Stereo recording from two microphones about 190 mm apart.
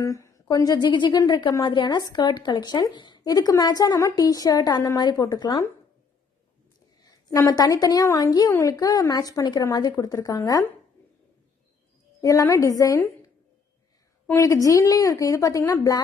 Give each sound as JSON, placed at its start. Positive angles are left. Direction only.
{"t": 0.0, "sound": "a woman's voice", "side_deg": 15}
{"t": 7.0, "sound": "a woman's voice", "side_deg": 20}
{"t": 12.2, "sound": "a woman's voice", "side_deg": 15}
{"t": 14.2, "sound": "a woman's voice", "side_deg": 15}